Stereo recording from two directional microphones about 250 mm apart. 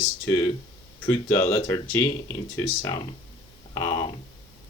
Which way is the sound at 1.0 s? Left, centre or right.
Centre.